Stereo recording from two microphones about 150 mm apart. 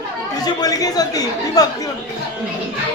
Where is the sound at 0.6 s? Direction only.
25° left (ahead or behind).